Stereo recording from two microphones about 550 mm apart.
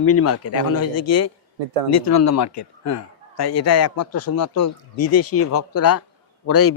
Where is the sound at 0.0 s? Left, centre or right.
Left.